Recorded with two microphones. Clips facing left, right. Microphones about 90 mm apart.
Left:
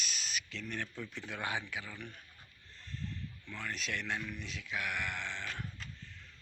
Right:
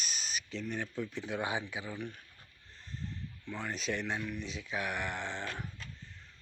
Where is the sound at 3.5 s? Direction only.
30° right (ahead or behind).